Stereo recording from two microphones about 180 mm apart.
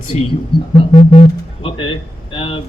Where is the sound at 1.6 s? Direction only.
30° left (ahead or behind).